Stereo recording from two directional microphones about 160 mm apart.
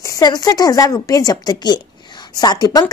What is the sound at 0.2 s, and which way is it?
Speech, 25° left (ahead or behind).